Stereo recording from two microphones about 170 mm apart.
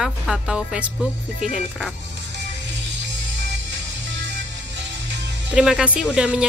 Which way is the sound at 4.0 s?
90° right.